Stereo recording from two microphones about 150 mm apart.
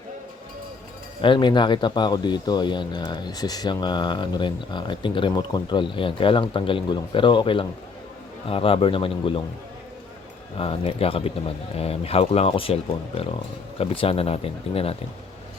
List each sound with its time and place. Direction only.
1.2 s speech: 35° left (ahead or behind)
10.6 s speech: 40° left (ahead or behind)